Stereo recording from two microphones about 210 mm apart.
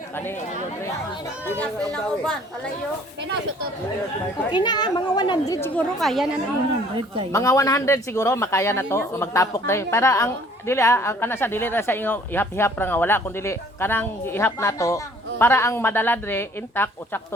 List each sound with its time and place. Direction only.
1.5 s speech: 5° left (ahead or behind)
4.5 s a woman's voice: 20° left (ahead or behind); by 6.2 s centre (ahead or behind)
7.3 s speech: 15° left (ahead or behind)